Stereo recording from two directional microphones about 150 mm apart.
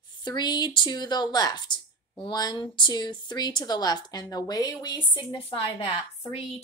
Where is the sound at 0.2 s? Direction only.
30° left (ahead or behind).